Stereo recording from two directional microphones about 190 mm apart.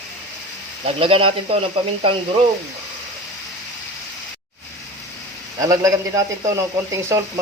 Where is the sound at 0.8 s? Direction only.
30° right (ahead or behind).